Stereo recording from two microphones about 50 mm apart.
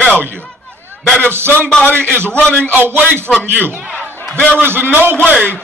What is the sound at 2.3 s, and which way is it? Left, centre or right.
Speech, left.